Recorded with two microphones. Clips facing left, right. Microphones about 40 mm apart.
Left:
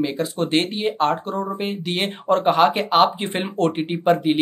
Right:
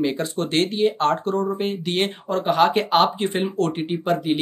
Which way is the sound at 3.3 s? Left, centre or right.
Left.